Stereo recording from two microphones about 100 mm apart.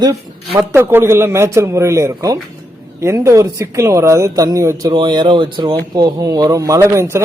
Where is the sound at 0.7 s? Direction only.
20° right (ahead or behind).